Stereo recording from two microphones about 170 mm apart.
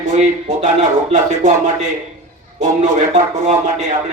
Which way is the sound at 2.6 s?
45° right (ahead or behind).